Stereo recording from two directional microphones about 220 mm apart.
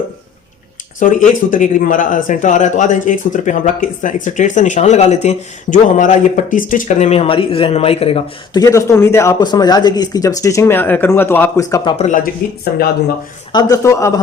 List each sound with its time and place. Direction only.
0.9 s a man's voice: 35° left (ahead or behind)
8.6 s speech: 15° left (ahead or behind)
11.9 s a man's voice: 35° left (ahead or behind)
13.5 s speech: 15° left (ahead or behind)